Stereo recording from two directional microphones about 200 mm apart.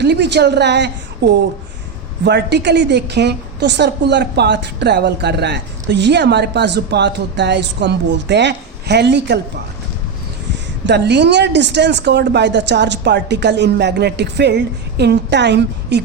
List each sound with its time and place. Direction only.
0.0 s a woman's voice: 60° right (ahead or behind)
10.8 s a woman's voice: 60° right (ahead or behind)